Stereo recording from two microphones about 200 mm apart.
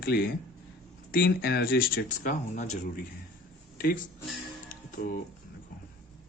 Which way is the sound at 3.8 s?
45° left (ahead or behind).